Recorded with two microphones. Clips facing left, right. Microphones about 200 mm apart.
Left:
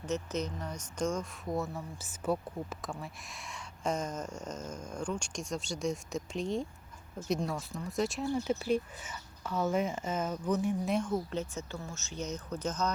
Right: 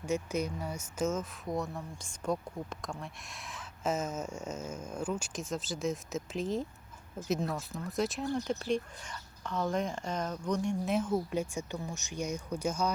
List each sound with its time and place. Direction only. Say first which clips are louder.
0.0 s speech: right 2 dB; 10° right (ahead or behind)